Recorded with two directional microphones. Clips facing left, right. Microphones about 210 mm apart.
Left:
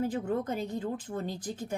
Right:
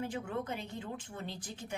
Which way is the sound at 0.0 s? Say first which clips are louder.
Left 7 dB; 40° left (ahead or behind).